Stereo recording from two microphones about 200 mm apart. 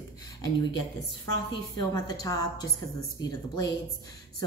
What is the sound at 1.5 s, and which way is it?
A woman's voice, 20° left (ahead or behind).